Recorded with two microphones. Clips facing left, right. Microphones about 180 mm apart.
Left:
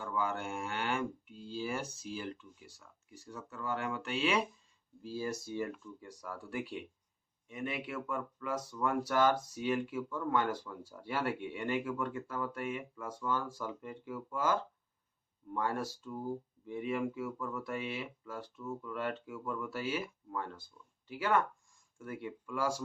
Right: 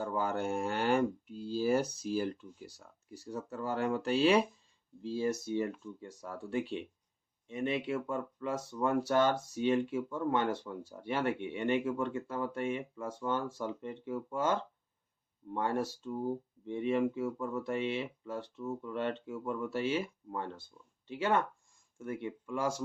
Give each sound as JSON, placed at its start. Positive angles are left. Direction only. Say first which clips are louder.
{"t": 0.0, "sound": "speech", "louder": "right 3 dB", "side_deg": -40}
{"t": 5.0, "sound": "speech", "louder": "right 5 dB", "side_deg": -25}